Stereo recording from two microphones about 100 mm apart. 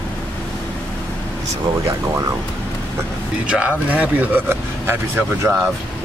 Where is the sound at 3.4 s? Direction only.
10° right (ahead or behind).